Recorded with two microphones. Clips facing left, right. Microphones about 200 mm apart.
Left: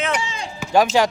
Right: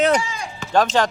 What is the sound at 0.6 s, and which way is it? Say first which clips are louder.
Speech: left 2 dB; 10° left (ahead or behind).